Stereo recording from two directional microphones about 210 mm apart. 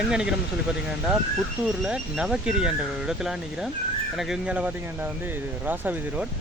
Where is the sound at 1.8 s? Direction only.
5° right (ahead or behind).